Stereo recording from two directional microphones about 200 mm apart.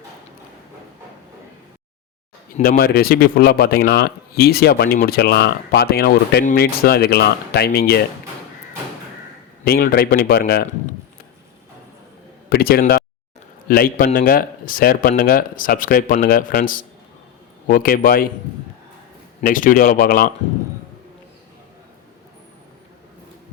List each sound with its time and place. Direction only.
2.6 s speech: 45° left (ahead or behind)
9.6 s speech: 50° left (ahead or behind)
12.5 s speech: 50° left (ahead or behind)
19.4 s speech: 45° left (ahead or behind)